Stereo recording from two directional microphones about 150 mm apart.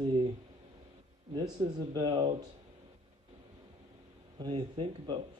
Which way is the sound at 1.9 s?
30° right (ahead or behind).